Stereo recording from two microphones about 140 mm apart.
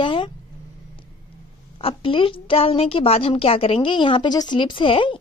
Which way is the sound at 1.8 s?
40° left (ahead or behind).